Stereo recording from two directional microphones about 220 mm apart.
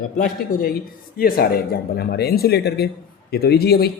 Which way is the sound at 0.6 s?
45° left (ahead or behind).